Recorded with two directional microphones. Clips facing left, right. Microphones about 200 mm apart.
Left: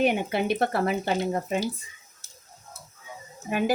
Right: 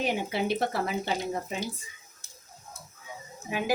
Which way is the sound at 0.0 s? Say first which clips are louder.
Left 5 dB; 60° left (ahead or behind).